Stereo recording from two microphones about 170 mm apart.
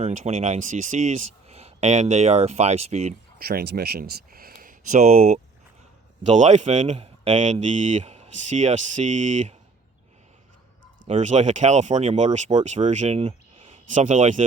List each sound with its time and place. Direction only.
0.0 s speech: 45° right (ahead or behind)
3.3 s speech: 60° right (ahead or behind); by 9.6 s 45° right (ahead or behind)
11.1 s speech: 45° right (ahead or behind)